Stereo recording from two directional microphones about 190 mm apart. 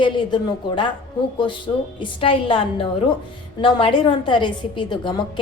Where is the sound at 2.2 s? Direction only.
30° left (ahead or behind).